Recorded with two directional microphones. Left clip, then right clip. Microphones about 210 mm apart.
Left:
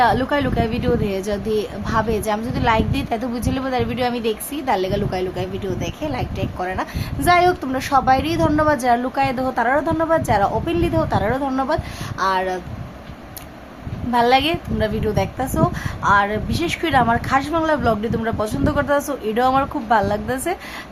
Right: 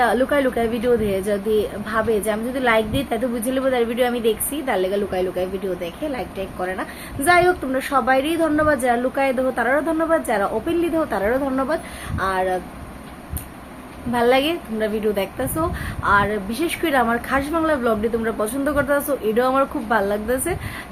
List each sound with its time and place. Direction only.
0.0 s speech: 15° left (ahead or behind)
14.1 s speech: 15° left (ahead or behind)